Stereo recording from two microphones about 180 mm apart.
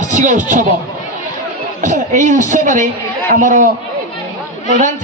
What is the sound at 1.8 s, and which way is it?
Music, 45° right (ahead or behind).